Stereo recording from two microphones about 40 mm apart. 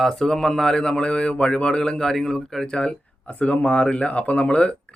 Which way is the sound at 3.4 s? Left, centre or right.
Left.